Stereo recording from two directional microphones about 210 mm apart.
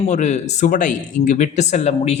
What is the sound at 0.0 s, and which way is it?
Speech, 35° left (ahead or behind).